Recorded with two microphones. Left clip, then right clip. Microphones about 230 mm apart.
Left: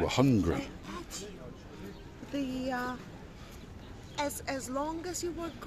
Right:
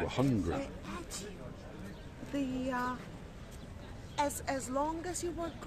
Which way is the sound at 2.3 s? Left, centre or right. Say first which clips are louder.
Left 1 dB; centre.